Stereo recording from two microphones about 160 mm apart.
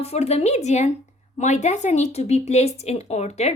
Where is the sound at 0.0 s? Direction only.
40° left (ahead or behind).